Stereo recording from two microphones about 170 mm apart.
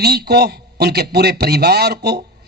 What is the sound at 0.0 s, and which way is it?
A man's voice, 70° right (ahead or behind).